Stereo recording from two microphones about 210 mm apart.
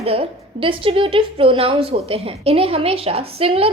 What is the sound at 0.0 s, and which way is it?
A woman's voice, 25° right (ahead or behind).